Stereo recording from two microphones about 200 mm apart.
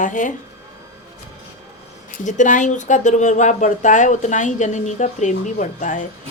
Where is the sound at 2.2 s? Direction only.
40° left (ahead or behind).